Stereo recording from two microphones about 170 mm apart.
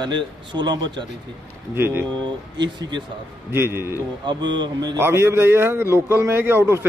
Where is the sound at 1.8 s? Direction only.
15° right (ahead or behind).